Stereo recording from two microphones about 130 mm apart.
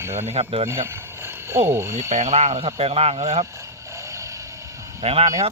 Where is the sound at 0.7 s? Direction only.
20° right (ahead or behind).